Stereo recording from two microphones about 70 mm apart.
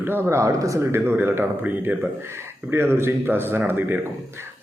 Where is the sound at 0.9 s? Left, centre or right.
Right.